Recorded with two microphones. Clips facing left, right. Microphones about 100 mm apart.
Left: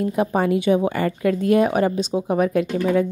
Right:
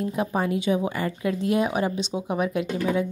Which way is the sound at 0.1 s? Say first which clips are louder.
Left 5 dB; 60° left (ahead or behind).